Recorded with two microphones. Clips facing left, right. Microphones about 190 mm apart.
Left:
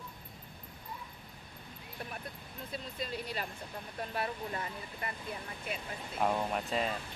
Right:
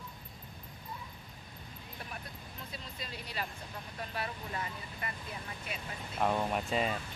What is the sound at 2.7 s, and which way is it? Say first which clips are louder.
Speech: left 8 dB; 50° left (ahead or behind).